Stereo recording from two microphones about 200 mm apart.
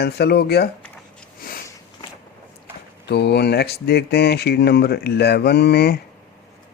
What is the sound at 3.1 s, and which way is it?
Speech, 55° left (ahead or behind).